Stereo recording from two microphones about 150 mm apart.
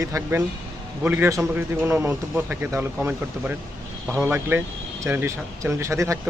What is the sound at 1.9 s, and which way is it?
Speech, 20° right (ahead or behind).